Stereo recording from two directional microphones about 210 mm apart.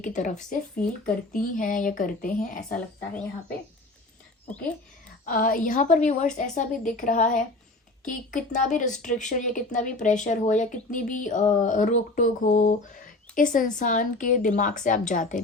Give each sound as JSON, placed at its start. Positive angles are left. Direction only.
{"t": 0.0, "sound": "speech", "side_deg": 35}
{"t": 5.2, "sound": "speech", "side_deg": 40}